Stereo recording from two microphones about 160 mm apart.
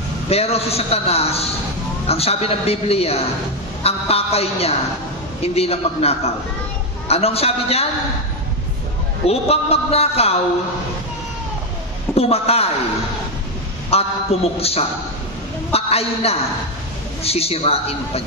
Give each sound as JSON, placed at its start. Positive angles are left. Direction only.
{"t": 0.3, "sound": "a man's voice", "side_deg": 40}
{"t": 9.3, "sound": "a man's voice", "side_deg": 40}
{"t": 12.2, "sound": "a man's voice", "side_deg": 40}
{"t": 13.9, "sound": "a man's voice", "side_deg": 40}